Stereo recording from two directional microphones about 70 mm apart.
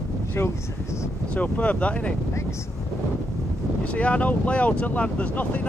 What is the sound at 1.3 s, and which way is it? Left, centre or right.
Speech, left.